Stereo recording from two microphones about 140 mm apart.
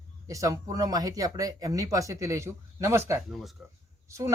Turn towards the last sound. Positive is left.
turn(degrees=-20)  # may be behind; listen again after turning